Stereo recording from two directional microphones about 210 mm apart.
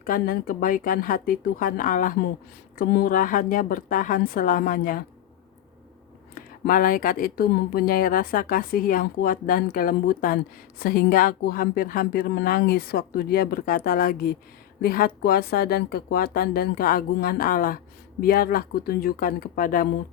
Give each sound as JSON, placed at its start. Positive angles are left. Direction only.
{"t": 0.0, "sound": "a woman's voice", "side_deg": 40}
{"t": 6.3, "sound": "speech", "side_deg": 40}